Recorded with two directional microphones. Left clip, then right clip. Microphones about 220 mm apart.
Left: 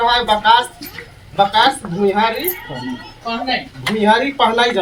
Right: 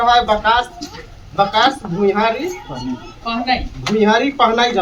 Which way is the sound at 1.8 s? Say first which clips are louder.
Right 1 dB; 35° left (ahead or behind).